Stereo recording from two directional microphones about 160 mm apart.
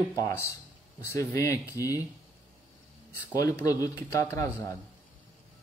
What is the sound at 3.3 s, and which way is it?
Speech, 20° left (ahead or behind).